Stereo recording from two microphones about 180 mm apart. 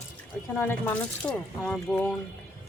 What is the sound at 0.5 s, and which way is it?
Speech, 10° left (ahead or behind).